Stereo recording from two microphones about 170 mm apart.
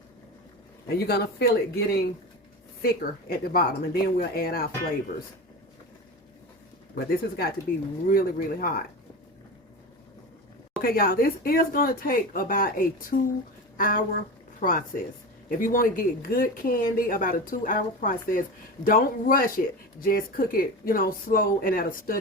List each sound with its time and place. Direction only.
0.9 s speech: 70° left (ahead or behind)
6.9 s speech: 60° left (ahead or behind)
10.8 s speech: 60° left (ahead or behind)